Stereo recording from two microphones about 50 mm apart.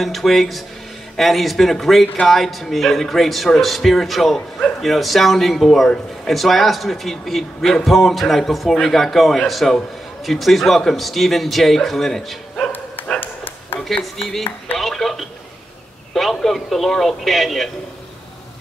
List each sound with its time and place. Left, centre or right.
0.0 s speech: centre
13.2 s dog: left
13.7 s a man's voice: centre